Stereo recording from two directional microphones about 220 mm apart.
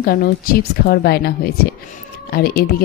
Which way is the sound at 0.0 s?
40° left (ahead or behind).